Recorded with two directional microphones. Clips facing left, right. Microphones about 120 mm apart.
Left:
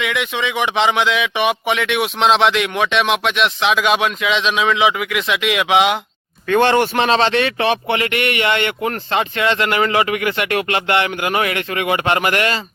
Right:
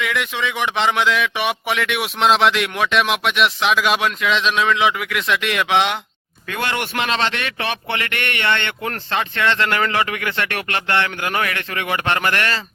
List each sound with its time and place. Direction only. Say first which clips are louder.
0.0 s speech: left 2 dB; centre (ahead or behind)
6.5 s speech: left 10 dB; 30° left (ahead or behind)